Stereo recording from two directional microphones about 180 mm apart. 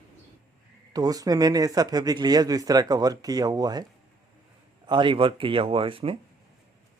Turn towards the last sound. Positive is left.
turn(degrees=-30)  # may be behind; listen again after turning